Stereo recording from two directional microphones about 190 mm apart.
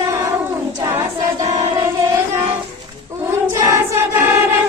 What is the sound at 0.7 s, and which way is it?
Choir, 15° right (ahead or behind).